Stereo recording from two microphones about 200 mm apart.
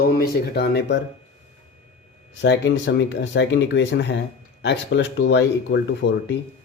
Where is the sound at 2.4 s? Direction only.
60° left (ahead or behind).